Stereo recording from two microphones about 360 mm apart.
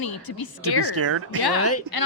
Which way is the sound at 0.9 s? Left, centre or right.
Right.